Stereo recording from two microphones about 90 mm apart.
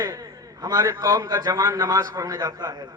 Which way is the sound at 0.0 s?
45° right (ahead or behind).